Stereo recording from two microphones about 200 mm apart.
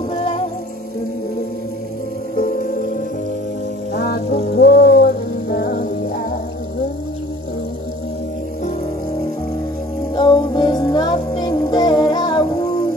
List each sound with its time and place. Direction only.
0.1 s music: 25° left (ahead or behind)
3.9 s music: 50° left (ahead or behind)
10.1 s music: 20° left (ahead or behind)